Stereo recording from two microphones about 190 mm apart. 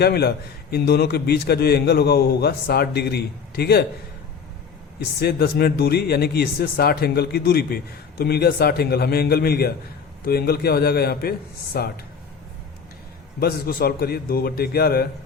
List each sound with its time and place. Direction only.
0.0 s a man's voice: 55° left (ahead or behind)
5.2 s a man's voice: 55° left (ahead or behind)
13.4 s a man's voice: 50° left (ahead or behind)